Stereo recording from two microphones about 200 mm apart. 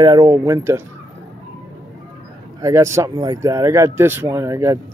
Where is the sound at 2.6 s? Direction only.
15° right (ahead or behind).